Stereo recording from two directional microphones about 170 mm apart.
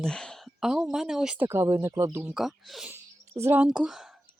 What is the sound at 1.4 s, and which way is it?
Speech, 15° right (ahead or behind).